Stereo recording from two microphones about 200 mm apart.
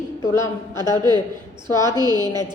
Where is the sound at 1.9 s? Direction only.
20° right (ahead or behind).